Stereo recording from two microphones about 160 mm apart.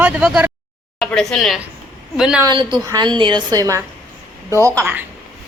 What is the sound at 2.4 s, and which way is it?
A woman's voice, 30° right (ahead or behind).